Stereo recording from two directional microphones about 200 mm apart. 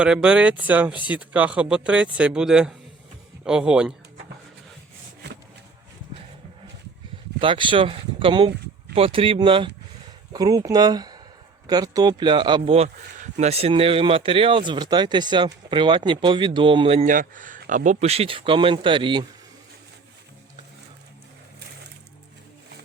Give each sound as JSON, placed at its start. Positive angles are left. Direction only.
{"t": 0.0, "sound": "speech", "side_deg": -5}
{"t": 7.3, "sound": "speech", "side_deg": -25}